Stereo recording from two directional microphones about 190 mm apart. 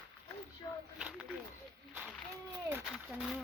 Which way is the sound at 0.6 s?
15° left (ahead or behind).